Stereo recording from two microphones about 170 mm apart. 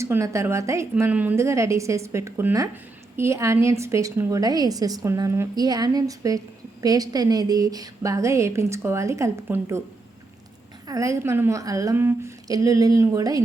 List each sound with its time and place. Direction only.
0.0 s a woman's voice: 15° right (ahead or behind)
10.8 s a woman's voice: 20° right (ahead or behind)